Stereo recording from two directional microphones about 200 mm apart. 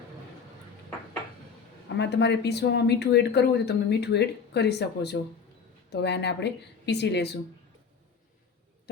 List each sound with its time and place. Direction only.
2.0 s speech: 60° left (ahead or behind)